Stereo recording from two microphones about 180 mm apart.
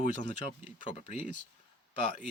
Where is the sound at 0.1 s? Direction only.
45° left (ahead or behind).